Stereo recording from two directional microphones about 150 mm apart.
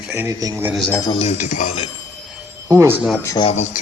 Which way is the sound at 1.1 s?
50° left (ahead or behind).